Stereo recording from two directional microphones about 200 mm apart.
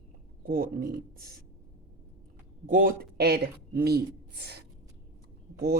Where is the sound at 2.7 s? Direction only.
45° right (ahead or behind).